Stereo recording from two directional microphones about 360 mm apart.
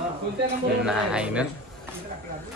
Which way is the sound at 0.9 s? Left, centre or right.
Centre.